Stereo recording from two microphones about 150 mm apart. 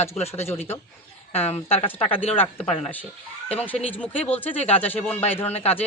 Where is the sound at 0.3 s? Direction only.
15° left (ahead or behind).